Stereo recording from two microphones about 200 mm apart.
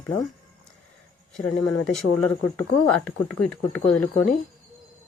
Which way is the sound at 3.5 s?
5° left (ahead or behind).